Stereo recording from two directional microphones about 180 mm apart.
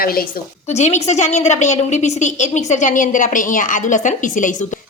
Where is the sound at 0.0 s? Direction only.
55° left (ahead or behind).